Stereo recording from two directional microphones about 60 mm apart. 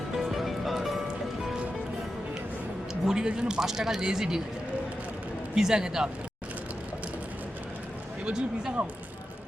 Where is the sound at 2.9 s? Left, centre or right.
Centre.